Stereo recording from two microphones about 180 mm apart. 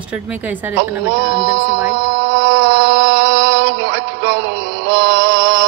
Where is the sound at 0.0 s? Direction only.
5° right (ahead or behind).